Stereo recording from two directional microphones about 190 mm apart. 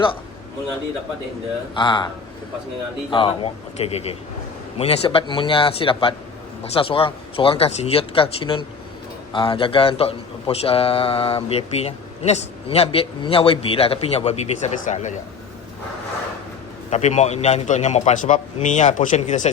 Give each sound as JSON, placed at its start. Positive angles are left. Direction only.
{"t": 1.7, "sound": "speech", "side_deg": 25}
{"t": 3.1, "sound": "a man's voice", "side_deg": 25}
{"t": 16.9, "sound": "a man's voice", "side_deg": 35}